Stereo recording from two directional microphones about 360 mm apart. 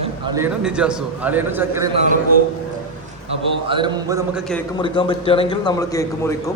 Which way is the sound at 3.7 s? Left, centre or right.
Centre.